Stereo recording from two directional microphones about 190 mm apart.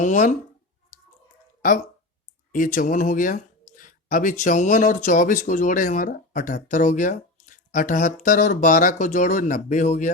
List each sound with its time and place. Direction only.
0.0 s speech: 40° left (ahead or behind)
2.5 s speech: 45° left (ahead or behind)